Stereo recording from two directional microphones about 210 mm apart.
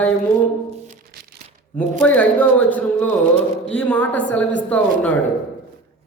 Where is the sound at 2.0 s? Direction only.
10° left (ahead or behind).